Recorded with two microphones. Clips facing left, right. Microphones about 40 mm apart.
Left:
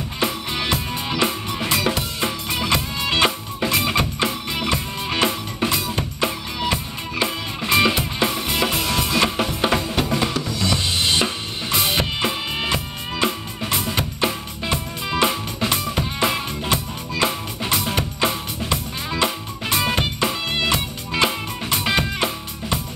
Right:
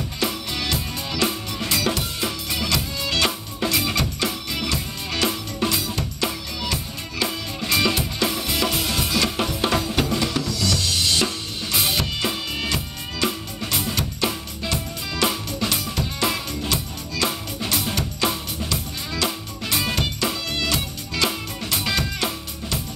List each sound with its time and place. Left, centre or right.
0.2 s music: left
10.4 s drum kit: left
11.9 s music: left